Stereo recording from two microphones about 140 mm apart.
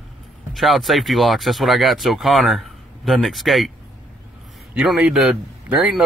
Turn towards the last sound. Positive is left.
turn(degrees=-10)  # may be behind; listen again after turning